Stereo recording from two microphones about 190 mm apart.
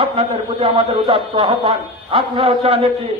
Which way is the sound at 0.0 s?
30° right (ahead or behind).